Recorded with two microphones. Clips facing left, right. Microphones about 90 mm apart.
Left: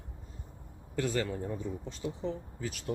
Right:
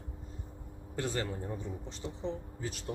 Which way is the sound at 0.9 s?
30° right (ahead or behind).